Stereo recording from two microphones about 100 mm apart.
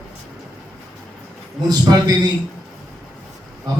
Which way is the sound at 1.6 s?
40° right (ahead or behind).